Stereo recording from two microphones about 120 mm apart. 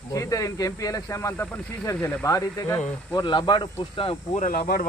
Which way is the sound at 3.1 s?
40° left (ahead or behind).